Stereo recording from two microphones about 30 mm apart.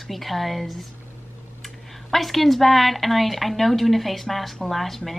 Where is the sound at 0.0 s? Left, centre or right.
Centre.